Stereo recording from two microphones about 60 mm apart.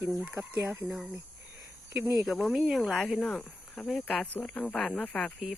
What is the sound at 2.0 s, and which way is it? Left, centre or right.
Speech, right.